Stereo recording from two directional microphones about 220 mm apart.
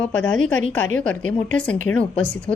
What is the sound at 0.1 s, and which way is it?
A woman's voice, 10° left (ahead or behind).